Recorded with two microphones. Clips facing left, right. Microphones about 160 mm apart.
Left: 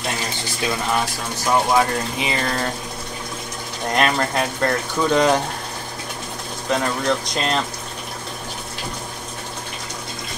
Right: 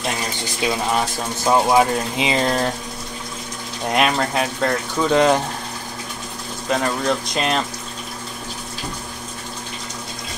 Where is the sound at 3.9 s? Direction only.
5° right (ahead or behind).